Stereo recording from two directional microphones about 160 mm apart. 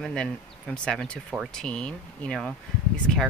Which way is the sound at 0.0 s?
5° left (ahead or behind).